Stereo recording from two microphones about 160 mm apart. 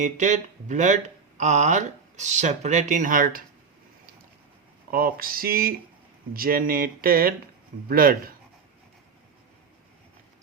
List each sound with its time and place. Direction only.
0.0 s speech: 50° right (ahead or behind)
4.9 s speech: 65° right (ahead or behind)